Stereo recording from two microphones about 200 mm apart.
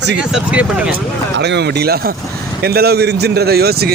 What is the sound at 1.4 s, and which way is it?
A man's voice, 55° right (ahead or behind).